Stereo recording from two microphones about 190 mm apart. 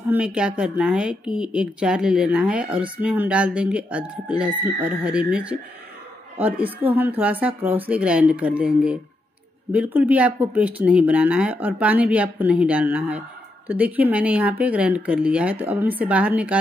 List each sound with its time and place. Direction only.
0.1 s a woman's voice: 5° right (ahead or behind)